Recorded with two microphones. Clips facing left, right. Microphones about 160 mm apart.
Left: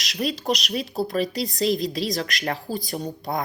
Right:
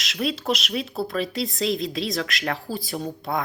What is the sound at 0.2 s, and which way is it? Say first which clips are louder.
Speech: even; centre (ahead or behind).